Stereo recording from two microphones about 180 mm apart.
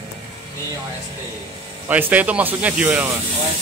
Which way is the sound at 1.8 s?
10° right (ahead or behind).